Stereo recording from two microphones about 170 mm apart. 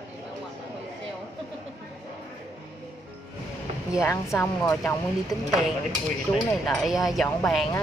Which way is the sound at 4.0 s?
15° left (ahead or behind).